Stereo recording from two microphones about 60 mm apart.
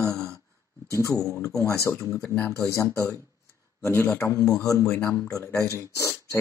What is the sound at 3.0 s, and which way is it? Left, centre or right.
A man's voice, left.